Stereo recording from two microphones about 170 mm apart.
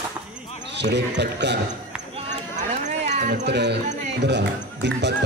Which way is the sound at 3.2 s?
80° right.